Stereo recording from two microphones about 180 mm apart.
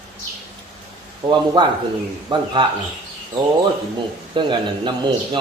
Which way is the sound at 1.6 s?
25° right (ahead or behind).